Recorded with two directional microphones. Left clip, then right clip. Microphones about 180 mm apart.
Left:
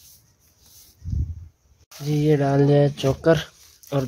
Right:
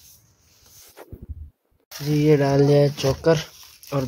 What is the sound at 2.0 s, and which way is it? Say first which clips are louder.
Speech: right 3 dB; 15° left (ahead or behind).